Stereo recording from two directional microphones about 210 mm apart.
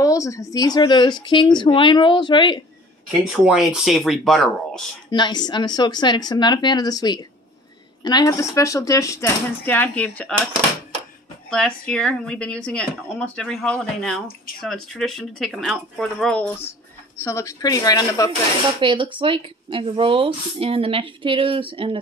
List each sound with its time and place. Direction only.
0.0 s a woman's voice: 15° left (ahead or behind)
3.3 s speech: centre (ahead or behind)
5.1 s a woman's voice: 20° left (ahead or behind)
11.5 s speech: 5° left (ahead or behind)
18.8 s speech: 25° right (ahead or behind)